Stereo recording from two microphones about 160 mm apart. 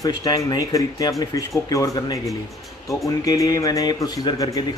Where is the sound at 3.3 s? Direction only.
20° left (ahead or behind).